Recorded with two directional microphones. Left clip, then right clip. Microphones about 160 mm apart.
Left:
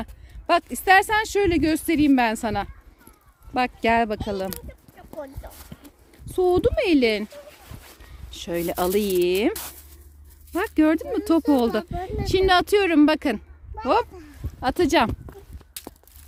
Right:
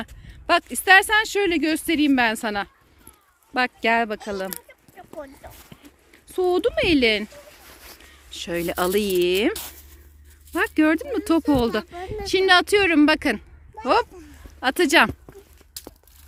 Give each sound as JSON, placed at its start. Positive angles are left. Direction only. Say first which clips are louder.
{"t": 0.0, "sound": "speech", "louder": "even", "side_deg": 5}
{"t": 5.4, "sound": "a sound", "louder": "even", "side_deg": 90}
{"t": 6.2, "sound": "speech", "louder": "left 1 dB", "side_deg": 15}
{"t": 8.3, "sound": "speech", "louder": "right 1 dB", "side_deg": 0}